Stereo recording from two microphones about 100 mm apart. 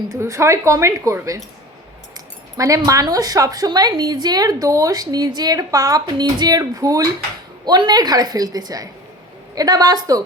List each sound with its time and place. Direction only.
0.1 s a woman's voice: 30° right (ahead or behind)
7.6 s speech: 45° right (ahead or behind)